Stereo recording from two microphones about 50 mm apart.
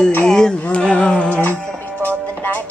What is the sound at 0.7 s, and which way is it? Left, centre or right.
Music, centre.